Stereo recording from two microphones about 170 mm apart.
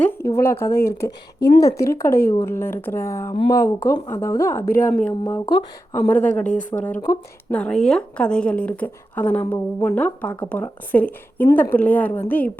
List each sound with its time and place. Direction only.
0.0 s a woman's voice: 15° left (ahead or behind)
0.9 s speech: 75° left (ahead or behind)
1.6 s a woman's voice: 15° left (ahead or behind)
7.5 s a woman's voice: 5° left (ahead or behind)